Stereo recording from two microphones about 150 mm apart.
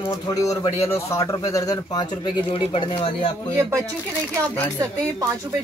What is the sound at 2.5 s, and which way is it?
Speech, 35° left (ahead or behind).